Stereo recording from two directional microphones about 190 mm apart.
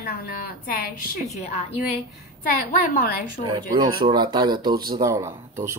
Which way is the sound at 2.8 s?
50° left (ahead or behind).